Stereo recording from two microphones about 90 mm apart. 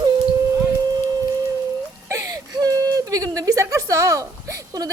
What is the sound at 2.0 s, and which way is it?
Whimper, 35° right (ahead or behind).